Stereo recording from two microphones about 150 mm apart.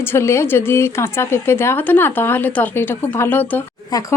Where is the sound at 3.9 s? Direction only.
20° left (ahead or behind).